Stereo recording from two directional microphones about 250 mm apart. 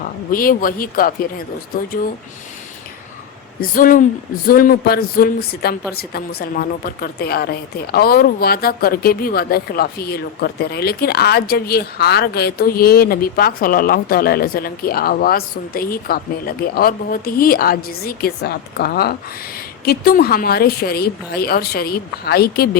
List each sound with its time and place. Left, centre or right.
0.0 s a woman's voice: left
3.6 s a woman's voice: left